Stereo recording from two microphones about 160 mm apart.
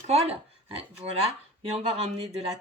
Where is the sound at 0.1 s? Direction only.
40° right (ahead or behind).